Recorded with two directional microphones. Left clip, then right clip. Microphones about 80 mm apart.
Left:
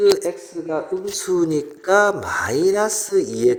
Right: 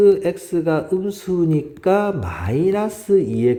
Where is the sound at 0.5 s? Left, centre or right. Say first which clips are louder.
Right 9 dB; right.